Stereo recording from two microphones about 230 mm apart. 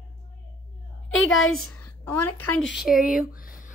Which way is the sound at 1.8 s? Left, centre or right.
Left.